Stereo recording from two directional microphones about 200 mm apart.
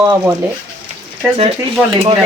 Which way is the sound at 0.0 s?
15° right (ahead or behind).